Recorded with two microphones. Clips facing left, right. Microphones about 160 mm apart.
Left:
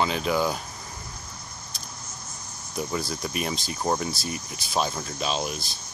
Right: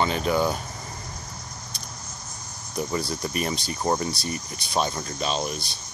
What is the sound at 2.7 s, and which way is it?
Speech, centre (ahead or behind).